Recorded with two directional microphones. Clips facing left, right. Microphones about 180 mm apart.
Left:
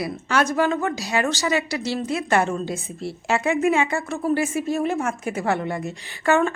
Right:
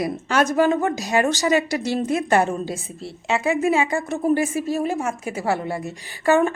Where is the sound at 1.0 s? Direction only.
45° right (ahead or behind).